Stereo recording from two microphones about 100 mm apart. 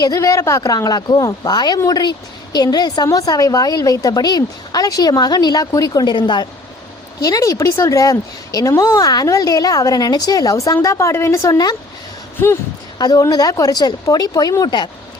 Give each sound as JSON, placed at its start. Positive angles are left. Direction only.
{"t": 0.0, "sound": "a woman's voice", "side_deg": 35}
{"t": 7.2, "sound": "a woman's voice", "side_deg": 35}
{"t": 13.0, "sound": "a woman's voice", "side_deg": 40}